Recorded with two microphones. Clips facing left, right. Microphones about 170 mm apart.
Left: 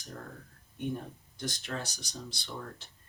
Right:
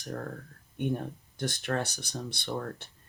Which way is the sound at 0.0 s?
60° right (ahead or behind).